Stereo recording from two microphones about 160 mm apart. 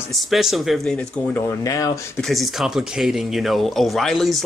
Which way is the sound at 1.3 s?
20° left (ahead or behind).